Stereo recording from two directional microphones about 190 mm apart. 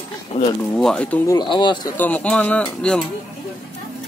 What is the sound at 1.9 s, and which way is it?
Speech, 10° left (ahead or behind).